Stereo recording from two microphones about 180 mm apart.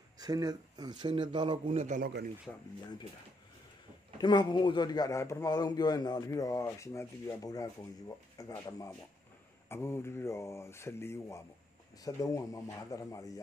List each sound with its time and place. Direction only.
0.2 s speech: 20° right (ahead or behind)
1.8 s speech: 45° right (ahead or behind)
2.0 s speech: 65° right (ahead or behind)
4.2 s a man's voice: 25° left (ahead or behind)